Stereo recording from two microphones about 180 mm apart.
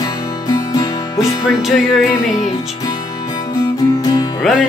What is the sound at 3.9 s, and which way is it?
Music, 20° left (ahead or behind).